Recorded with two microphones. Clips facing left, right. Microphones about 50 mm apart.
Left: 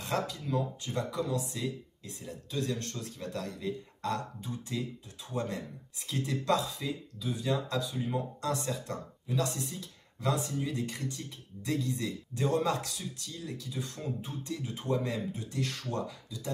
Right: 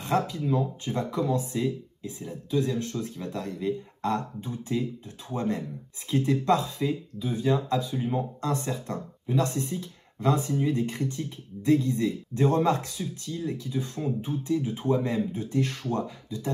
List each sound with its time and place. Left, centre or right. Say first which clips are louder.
0.0 s speech: right 7 dB; right
2.0 s speech: right 9 dB; centre
15.3 s speech: right 8 dB; right